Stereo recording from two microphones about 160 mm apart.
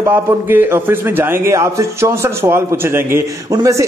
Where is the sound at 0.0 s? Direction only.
10° right (ahead or behind).